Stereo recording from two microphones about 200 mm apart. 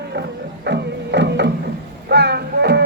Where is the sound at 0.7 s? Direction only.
60° right (ahead or behind).